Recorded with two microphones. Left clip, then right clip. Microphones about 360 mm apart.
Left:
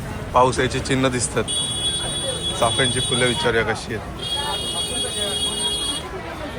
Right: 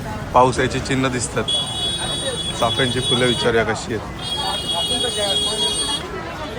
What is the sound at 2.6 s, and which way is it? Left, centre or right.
Speech, centre.